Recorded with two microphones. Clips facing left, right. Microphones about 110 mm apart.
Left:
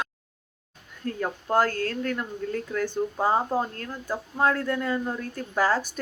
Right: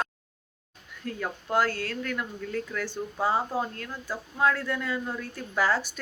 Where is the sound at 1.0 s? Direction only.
40° left (ahead or behind).